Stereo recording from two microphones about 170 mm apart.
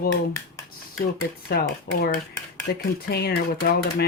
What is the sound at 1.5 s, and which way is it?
Speech, 65° left (ahead or behind).